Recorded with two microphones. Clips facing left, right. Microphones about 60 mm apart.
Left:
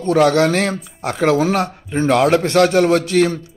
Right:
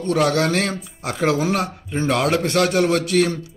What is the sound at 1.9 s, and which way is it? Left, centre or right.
Speech, centre.